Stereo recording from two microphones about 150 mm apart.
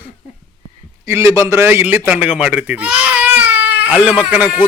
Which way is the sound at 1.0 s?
20° right (ahead or behind).